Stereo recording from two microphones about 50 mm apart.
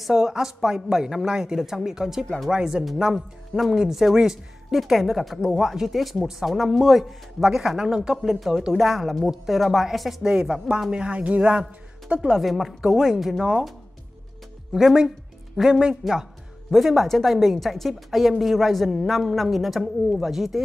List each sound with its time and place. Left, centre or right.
0.1 s speech: centre
10.2 s speech: centre
12.4 s speech: centre
14.7 s speech: centre